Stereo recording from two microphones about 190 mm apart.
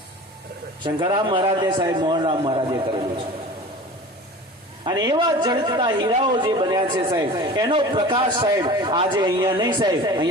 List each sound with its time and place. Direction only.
0.9 s a man's voice: 25° right (ahead or behind)
4.9 s a man's voice: 20° right (ahead or behind)